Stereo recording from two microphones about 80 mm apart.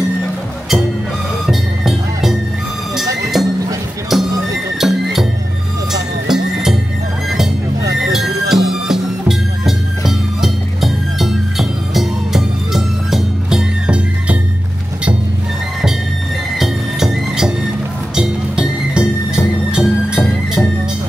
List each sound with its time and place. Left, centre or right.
1.4 s music: centre
3.3 s a sound: centre
4.1 s music: centre
8.1 s music: centre
16.5 s music: centre